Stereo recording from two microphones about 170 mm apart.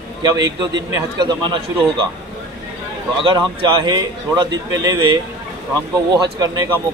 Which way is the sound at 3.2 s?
30° right (ahead or behind).